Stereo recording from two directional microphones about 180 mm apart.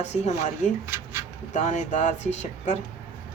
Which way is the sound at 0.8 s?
15° right (ahead or behind).